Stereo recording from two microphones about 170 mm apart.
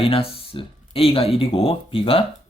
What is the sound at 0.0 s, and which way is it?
Speech, 35° left (ahead or behind).